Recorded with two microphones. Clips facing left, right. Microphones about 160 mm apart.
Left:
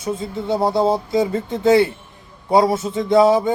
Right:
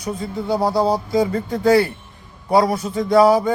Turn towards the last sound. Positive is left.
turn(degrees=20)  # may be behind; listen again after turning